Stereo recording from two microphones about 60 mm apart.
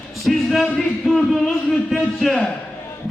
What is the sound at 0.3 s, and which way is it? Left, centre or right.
A man's voice, centre.